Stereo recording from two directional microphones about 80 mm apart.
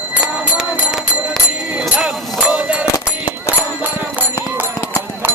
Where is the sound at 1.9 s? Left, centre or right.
Centre.